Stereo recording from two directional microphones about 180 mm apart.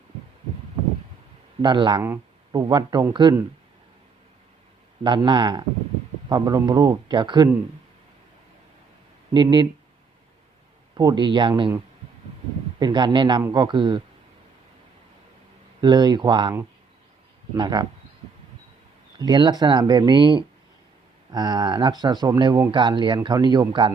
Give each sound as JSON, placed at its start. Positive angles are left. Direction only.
{"t": 1.6, "sound": "speech", "side_deg": -25}
{"t": 5.0, "sound": "speech", "side_deg": -25}
{"t": 9.3, "sound": "speech", "side_deg": -25}
{"t": 10.9, "sound": "speech", "side_deg": -20}
{"t": 12.8, "sound": "speech", "side_deg": -25}
{"t": 15.8, "sound": "speech", "side_deg": -25}
{"t": 17.6, "sound": "speech", "side_deg": -25}
{"t": 19.2, "sound": "speech", "side_deg": -25}